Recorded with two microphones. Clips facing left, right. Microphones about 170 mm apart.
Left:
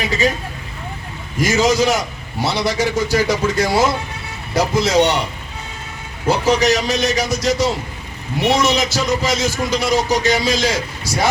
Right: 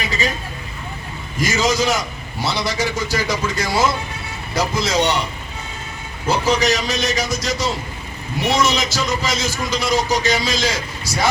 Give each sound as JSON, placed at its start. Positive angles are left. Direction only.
{"t": 1.4, "sound": "a man's voice", "side_deg": 65}
{"t": 6.2, "sound": "a man's voice", "side_deg": 65}